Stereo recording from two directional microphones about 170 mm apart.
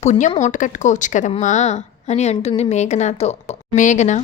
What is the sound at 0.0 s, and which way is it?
Speech, 40° left (ahead or behind).